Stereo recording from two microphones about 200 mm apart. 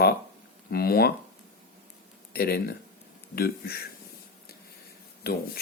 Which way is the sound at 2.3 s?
50° left (ahead or behind).